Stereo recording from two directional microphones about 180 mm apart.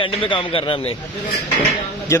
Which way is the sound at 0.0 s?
30° left (ahead or behind).